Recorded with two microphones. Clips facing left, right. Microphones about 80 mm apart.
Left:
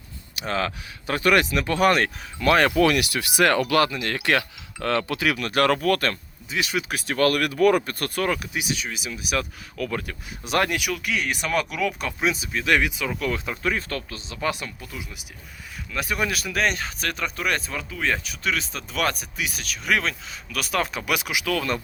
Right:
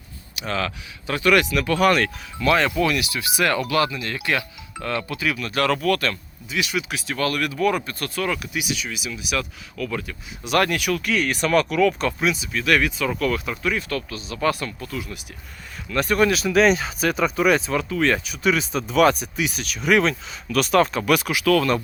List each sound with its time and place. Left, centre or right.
0.3 s speech: left
2.6 s speech: left
10.6 s speech: centre
12.2 s speech: left
12.7 s speech: centre
14.4 s speech: centre